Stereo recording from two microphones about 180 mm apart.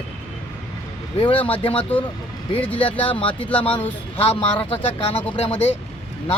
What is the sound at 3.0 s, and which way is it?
Speech, 30° left (ahead or behind).